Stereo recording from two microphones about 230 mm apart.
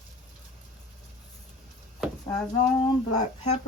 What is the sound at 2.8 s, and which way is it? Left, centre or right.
Speech, left.